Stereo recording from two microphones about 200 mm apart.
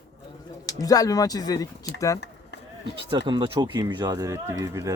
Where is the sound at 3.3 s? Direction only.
20° right (ahead or behind).